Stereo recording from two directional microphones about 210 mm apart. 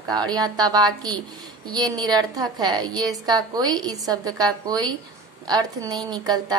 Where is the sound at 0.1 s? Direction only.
20° right (ahead or behind).